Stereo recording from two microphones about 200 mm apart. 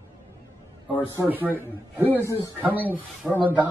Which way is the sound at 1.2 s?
10° right (ahead or behind).